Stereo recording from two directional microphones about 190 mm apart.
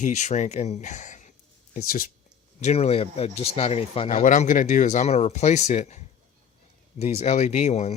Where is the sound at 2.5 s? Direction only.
35° left (ahead or behind).